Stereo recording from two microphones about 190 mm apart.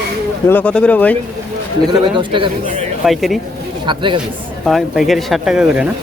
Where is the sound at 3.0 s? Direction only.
Centre (ahead or behind).